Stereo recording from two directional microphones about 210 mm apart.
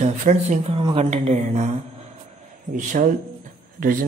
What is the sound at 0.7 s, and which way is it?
Speech, 25° right (ahead or behind).